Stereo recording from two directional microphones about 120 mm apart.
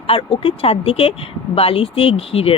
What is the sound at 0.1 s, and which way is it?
Speech, 50° left (ahead or behind).